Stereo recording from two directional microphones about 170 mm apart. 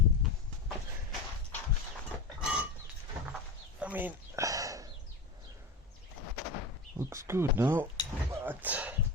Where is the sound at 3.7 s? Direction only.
10° right (ahead or behind).